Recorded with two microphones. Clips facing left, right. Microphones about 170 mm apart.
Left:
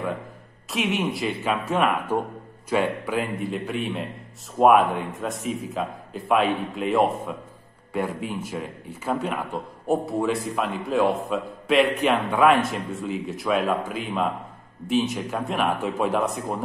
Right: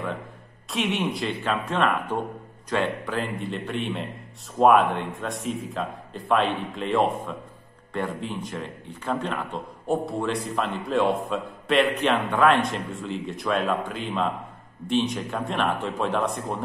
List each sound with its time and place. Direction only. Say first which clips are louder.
0.7 s a man's voice: left 1 dB; centre (ahead or behind)